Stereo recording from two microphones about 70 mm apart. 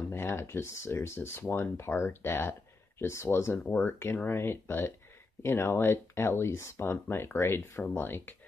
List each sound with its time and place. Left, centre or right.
0.1 s speech: left
3.5 s speech: left
4.0 s speech: left